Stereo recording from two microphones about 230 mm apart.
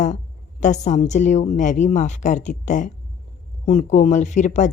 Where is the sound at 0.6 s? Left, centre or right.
Left.